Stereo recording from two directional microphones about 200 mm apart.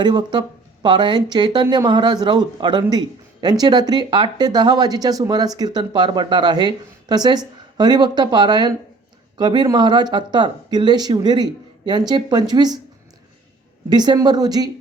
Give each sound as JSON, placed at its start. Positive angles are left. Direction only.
{"t": 0.0, "sound": "speech", "side_deg": -20}
{"t": 13.9, "sound": "speech", "side_deg": -20}